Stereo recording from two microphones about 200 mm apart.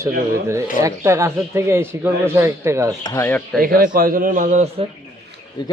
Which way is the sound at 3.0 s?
15° left (ahead or behind).